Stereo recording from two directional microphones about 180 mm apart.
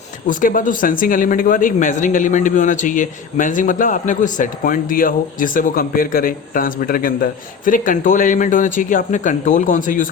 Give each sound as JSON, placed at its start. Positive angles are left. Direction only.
{"t": 0.3, "sound": "speech", "side_deg": 50}